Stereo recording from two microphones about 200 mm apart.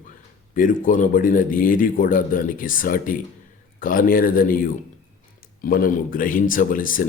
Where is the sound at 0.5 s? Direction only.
45° left (ahead or behind).